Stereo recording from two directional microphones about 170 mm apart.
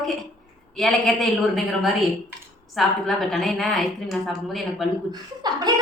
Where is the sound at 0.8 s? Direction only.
Centre (ahead or behind).